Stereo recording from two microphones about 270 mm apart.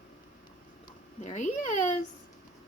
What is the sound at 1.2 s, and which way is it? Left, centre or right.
Speech, left.